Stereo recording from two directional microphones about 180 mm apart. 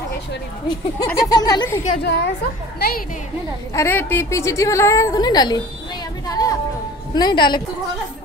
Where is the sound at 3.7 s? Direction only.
15° left (ahead or behind).